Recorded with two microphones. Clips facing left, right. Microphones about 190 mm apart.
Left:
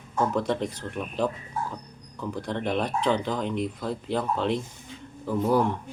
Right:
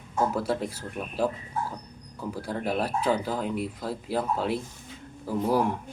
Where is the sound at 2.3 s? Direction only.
5° right (ahead or behind).